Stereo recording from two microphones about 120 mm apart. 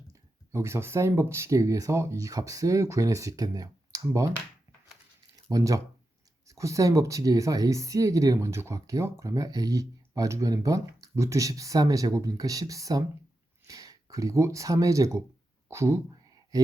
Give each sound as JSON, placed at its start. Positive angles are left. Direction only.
{"t": 0.1, "sound": "speech", "side_deg": -25}
{"t": 5.5, "sound": "speech", "side_deg": -30}
{"t": 15.7, "sound": "a sound", "side_deg": -25}